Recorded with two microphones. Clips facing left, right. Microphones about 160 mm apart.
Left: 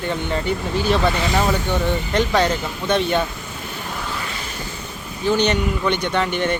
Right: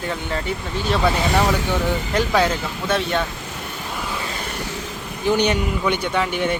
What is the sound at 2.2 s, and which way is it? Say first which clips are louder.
Speech: left 1 dB; 5° right (ahead or behind).